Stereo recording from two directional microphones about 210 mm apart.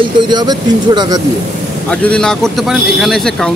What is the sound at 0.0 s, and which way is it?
Speech, 20° right (ahead or behind).